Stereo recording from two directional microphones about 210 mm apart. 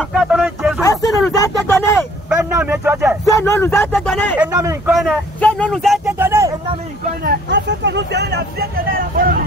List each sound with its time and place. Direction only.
0.1 s speech: centre (ahead or behind)
0.8 s a sound: 15° left (ahead or behind)
2.2 s speech: 5° right (ahead or behind)
3.3 s speech: 10° left (ahead or behind)
4.4 s speech: 15° right (ahead or behind)
4.9 s speech: centre (ahead or behind)
6.1 s vehicle: 10° right (ahead or behind)
7.2 s speech: 55° right (ahead or behind)